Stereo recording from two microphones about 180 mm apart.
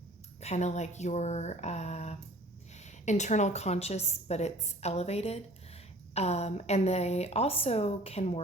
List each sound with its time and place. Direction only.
0.3 s a woman's voice: 40° left (ahead or behind)